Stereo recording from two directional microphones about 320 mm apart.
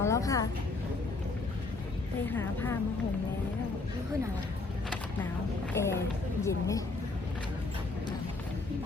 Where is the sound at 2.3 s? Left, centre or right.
Centre.